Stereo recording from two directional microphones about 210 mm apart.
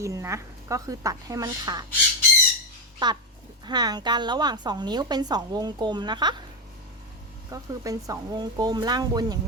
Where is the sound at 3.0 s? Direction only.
20° right (ahead or behind).